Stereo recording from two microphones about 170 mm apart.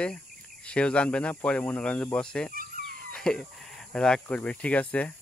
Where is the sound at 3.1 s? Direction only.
5° left (ahead or behind).